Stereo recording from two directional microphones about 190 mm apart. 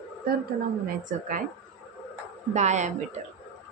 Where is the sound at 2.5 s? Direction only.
40° right (ahead or behind).